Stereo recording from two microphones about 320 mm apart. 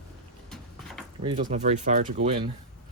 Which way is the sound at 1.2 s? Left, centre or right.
Right.